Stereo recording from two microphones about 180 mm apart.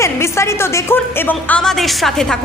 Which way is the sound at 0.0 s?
15° left (ahead or behind).